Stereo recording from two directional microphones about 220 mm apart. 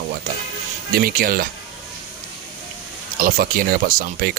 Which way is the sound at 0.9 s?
40° right (ahead or behind).